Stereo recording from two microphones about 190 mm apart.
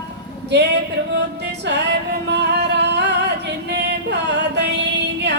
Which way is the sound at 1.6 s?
65° right (ahead or behind).